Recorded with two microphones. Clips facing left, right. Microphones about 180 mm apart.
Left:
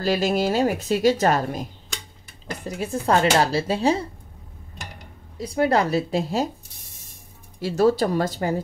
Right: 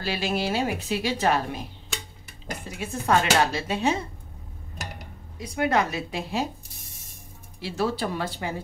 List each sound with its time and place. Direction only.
0.0 s a woman's voice: 40° left (ahead or behind)
2.8 s speech: 35° left (ahead or behind)
4.8 s a sound: 5° right (ahead or behind)
5.4 s speech: 35° left (ahead or behind)
7.6 s speech: 40° left (ahead or behind)